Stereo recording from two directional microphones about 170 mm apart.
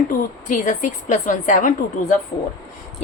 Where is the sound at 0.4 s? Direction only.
45° left (ahead or behind).